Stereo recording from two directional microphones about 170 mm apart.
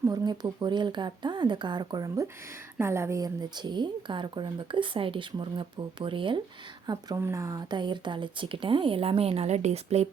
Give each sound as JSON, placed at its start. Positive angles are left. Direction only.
{"t": 0.0, "sound": "a woman's voice", "side_deg": -20}